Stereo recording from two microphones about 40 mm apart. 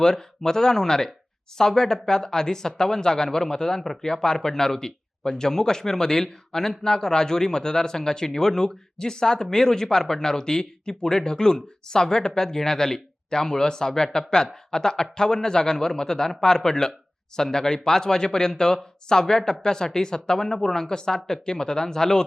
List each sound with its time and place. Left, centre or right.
0.0 s speech: centre